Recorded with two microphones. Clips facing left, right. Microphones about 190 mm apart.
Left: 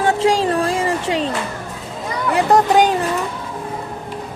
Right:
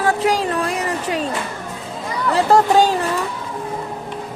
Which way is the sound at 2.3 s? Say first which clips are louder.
Even; 20° left (ahead or behind).